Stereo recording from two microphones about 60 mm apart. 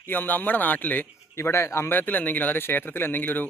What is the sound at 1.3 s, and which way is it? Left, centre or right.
Speech, left.